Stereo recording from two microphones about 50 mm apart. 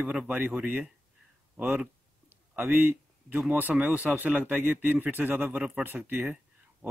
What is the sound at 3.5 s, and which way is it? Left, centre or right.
Speech, right.